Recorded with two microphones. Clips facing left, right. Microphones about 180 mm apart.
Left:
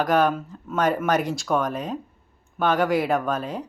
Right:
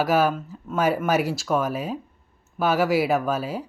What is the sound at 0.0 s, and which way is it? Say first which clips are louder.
Speech: even; 5° right (ahead or behind).